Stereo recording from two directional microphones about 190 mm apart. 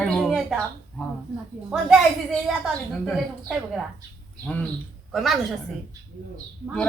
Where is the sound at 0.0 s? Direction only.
Centre (ahead or behind).